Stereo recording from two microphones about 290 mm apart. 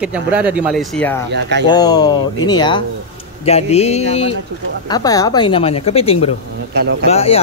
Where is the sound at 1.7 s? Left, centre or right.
Centre.